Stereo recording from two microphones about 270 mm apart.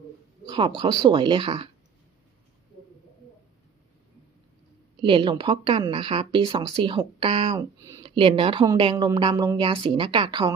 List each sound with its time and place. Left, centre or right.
0.4 s a sound: centre
0.8 s a woman's voice: centre
5.0 s a woman's voice: centre